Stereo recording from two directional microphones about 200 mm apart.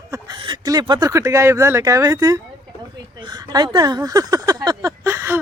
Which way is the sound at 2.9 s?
20° right (ahead or behind).